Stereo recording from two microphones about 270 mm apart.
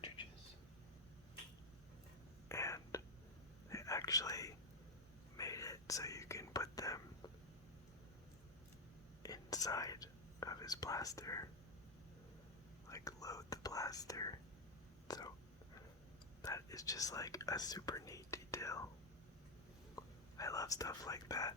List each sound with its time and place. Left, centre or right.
2.5 s whispering: centre
9.2 s whispering: centre
12.9 s whispering: centre
16.4 s whispering: centre
20.0 s whispering: centre